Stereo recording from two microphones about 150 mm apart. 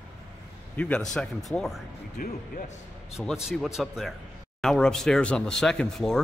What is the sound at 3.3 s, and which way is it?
Speech, centre (ahead or behind).